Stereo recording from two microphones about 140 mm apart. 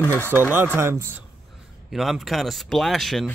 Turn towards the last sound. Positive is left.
turn(degrees=0)  # may be behind; listen again after turning